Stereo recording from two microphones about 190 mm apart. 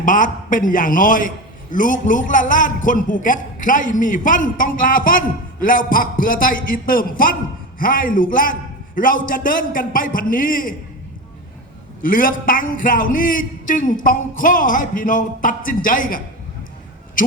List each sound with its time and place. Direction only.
0.0 s a man's voice: 45° left (ahead or behind)
12.0 s a man's voice: 45° left (ahead or behind)